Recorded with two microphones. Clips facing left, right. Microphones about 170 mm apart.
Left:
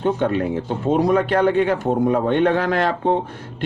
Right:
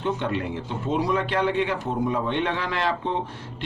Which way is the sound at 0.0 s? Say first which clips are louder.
Left 7 dB; 50° left (ahead or behind).